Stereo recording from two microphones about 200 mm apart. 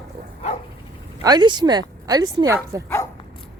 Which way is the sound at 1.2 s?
20° right (ahead or behind).